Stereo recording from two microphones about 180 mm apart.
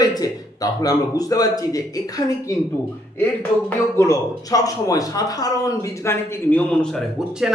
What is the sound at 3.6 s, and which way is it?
Speech, 15° left (ahead or behind).